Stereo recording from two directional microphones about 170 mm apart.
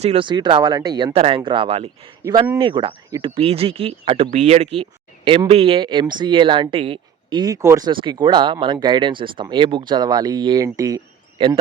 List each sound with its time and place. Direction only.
0.0 s speech: 35° right (ahead or behind)
11.3 s speech: 30° right (ahead or behind)